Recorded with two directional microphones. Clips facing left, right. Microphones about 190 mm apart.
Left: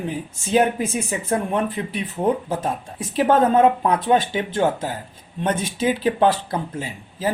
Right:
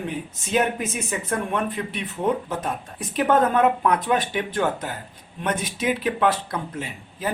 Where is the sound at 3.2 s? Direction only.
30° left (ahead or behind).